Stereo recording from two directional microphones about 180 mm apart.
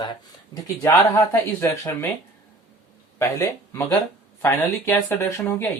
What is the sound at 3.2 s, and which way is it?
Speech, 15° left (ahead or behind).